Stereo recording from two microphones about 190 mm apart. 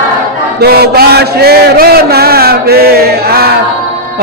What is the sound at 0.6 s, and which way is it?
Mantra, 55° right (ahead or behind).